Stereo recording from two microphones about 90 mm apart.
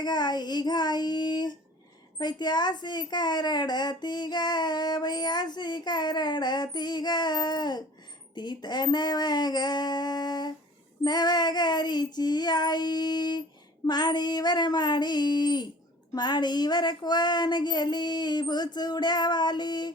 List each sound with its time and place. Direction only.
0.0 s a woman's voice: 50° left (ahead or behind)